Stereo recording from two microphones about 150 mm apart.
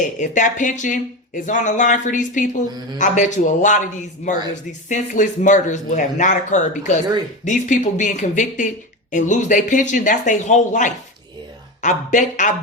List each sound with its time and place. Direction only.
0.2 s speech: 55° left (ahead or behind)